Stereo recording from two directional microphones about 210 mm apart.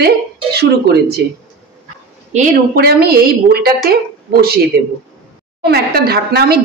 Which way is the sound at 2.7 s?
50° right (ahead or behind).